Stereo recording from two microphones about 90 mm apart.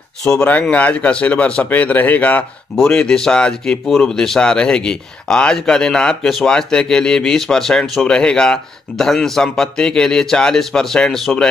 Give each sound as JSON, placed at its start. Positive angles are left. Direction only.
{"t": 0.4, "sound": "speech", "side_deg": 20}